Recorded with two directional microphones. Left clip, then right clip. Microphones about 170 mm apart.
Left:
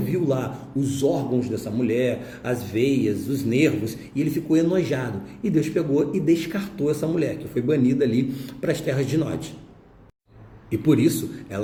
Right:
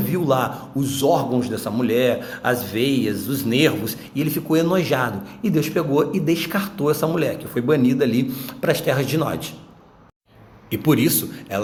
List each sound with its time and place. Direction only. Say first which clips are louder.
0.0 s speech: right 4 dB; 15° left (ahead or behind)
10.7 s speech: right 1 dB; 15° left (ahead or behind)